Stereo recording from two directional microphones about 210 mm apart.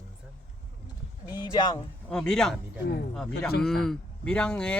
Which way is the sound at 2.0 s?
5° left (ahead or behind).